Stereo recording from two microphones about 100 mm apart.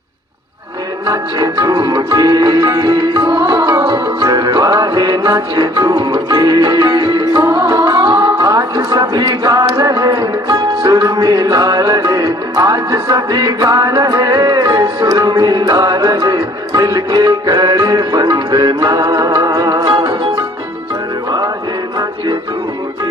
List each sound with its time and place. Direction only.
1.0 s music: 40° right (ahead or behind)
7.4 s carnatic music: 30° right (ahead or behind)
8.4 s music: 40° right (ahead or behind)